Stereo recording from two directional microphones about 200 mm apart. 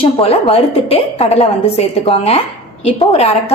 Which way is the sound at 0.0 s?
30° left (ahead or behind).